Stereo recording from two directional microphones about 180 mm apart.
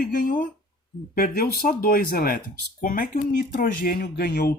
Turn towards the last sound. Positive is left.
turn(degrees=60)  # may be behind; listen again after turning